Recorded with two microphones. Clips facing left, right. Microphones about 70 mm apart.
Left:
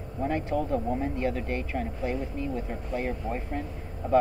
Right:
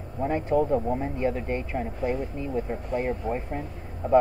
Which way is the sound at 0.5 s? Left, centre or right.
Centre.